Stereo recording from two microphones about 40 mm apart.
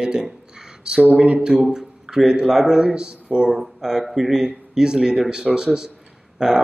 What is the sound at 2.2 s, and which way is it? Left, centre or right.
Speech, centre.